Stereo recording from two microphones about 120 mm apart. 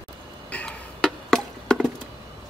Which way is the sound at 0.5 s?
10° left (ahead or behind).